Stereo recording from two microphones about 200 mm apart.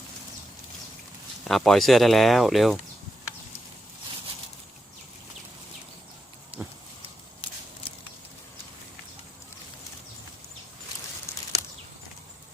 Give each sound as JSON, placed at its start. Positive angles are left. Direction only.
{"t": 1.5, "sound": "speech", "side_deg": 0}
{"t": 6.5, "sound": "pig", "side_deg": -25}
{"t": 11.3, "sound": "a sound", "side_deg": 15}